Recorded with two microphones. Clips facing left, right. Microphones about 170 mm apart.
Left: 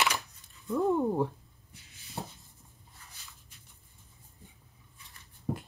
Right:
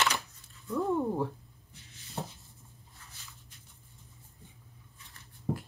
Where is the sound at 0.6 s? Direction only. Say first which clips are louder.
Left 2 dB; 15° left (ahead or behind).